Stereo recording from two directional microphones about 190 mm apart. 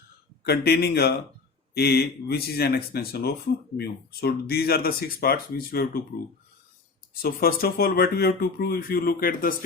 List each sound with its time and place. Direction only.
0.4 s speech: 55° left (ahead or behind)
7.2 s speech: 50° left (ahead or behind)